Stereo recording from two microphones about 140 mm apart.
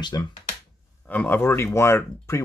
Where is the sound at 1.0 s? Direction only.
10° left (ahead or behind).